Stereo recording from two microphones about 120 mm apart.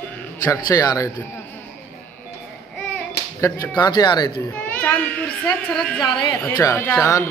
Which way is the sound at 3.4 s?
20° left (ahead or behind).